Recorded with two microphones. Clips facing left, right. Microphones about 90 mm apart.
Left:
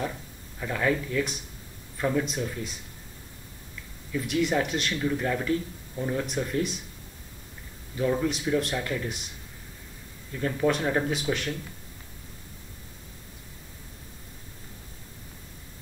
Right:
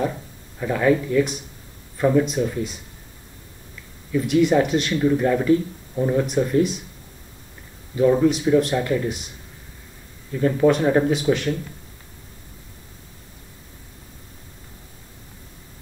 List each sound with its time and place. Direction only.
0.6 s speech: 10° right (ahead or behind)
4.1 s speech: 5° right (ahead or behind)
7.9 s speech: 5° right (ahead or behind)
10.3 s speech: 5° right (ahead or behind)